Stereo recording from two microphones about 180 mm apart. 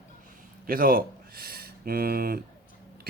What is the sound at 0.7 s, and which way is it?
Speech, 55° right (ahead or behind).